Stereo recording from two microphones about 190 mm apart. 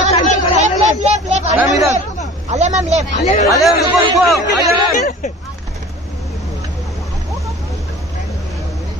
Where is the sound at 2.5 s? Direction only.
40° right (ahead or behind).